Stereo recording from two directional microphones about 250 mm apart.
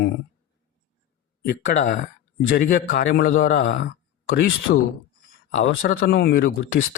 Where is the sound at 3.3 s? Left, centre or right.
Left.